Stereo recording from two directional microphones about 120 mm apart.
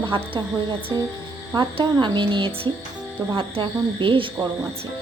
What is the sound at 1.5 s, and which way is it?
Speech, 40° right (ahead or behind).